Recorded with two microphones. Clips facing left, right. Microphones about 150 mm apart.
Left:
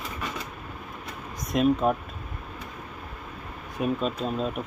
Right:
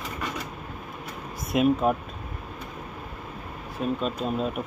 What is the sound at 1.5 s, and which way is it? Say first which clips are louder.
Speech: right 1 dB; 5° right (ahead or behind).